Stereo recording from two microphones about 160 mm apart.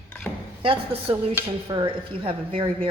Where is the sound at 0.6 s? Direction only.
35° right (ahead or behind).